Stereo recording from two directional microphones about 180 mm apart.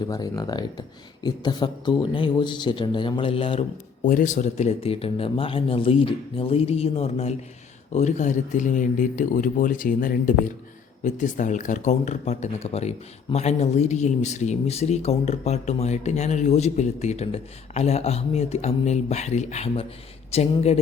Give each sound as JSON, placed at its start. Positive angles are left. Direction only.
{"t": 0.0, "sound": "speech", "side_deg": 20}
{"t": 4.0, "sound": "a man's voice", "side_deg": 45}